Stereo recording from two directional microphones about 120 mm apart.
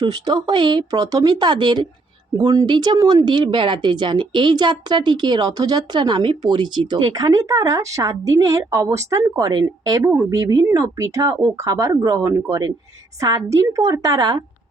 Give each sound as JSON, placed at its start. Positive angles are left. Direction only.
{"t": 0.1, "sound": "speech", "side_deg": -35}